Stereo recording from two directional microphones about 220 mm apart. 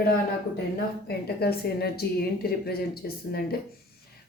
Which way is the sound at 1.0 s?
45° left (ahead or behind).